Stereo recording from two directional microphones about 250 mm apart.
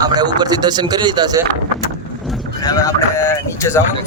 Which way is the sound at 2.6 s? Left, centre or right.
Centre.